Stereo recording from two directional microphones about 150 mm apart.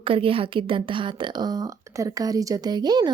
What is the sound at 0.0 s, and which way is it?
A woman's voice, 35° right (ahead or behind).